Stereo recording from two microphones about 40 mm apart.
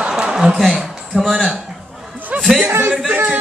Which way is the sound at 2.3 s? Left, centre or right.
Right.